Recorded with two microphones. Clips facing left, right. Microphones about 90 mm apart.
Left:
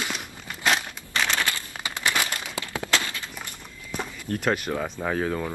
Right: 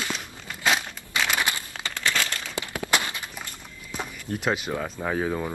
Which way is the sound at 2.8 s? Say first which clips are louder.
Right 1 dB; 20° right (ahead or behind).